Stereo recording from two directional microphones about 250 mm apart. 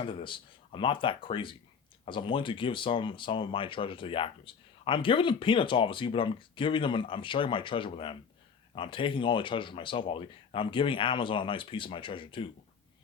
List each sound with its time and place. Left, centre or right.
0.0 s speech: centre